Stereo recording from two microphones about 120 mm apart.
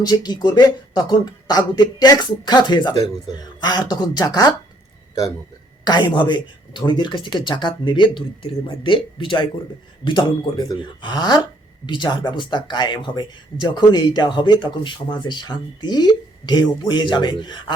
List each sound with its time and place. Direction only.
0.0 s speech: 35° left (ahead or behind)
5.8 s a woman's voice: 35° left (ahead or behind)
10.4 s speech: 30° left (ahead or behind)